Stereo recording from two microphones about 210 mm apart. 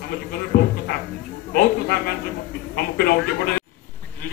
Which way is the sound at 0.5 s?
40° left (ahead or behind).